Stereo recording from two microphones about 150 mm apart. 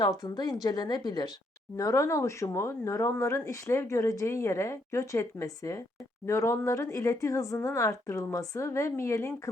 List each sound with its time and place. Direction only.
0.0 s speech: 25° left (ahead or behind)